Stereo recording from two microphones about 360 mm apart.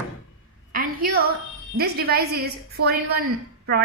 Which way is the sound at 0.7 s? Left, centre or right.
Right.